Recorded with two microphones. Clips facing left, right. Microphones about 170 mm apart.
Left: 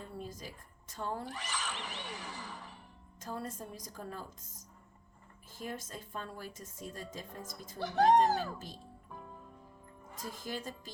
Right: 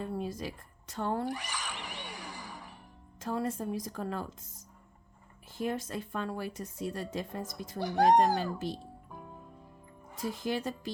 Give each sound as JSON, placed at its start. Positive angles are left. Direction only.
{"t": 0.0, "sound": "a woman's voice", "side_deg": -75}
{"t": 1.3, "sound": "music", "side_deg": -10}
{"t": 3.2, "sound": "speech", "side_deg": -70}
{"t": 5.5, "sound": "speech", "side_deg": -70}
{"t": 7.8, "sound": "speech", "side_deg": -10}
{"t": 10.2, "sound": "speech", "side_deg": -70}